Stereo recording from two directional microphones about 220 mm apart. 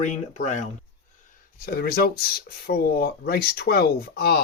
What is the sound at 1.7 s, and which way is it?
Speech, 45° left (ahead or behind).